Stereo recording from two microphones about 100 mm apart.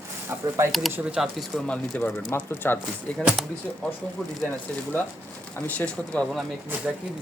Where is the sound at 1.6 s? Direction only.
15° left (ahead or behind).